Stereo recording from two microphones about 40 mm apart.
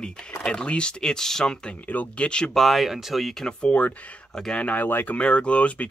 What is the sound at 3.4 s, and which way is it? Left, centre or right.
Speech, left.